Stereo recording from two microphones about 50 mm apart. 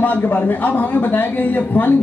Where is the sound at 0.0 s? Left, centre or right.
Left.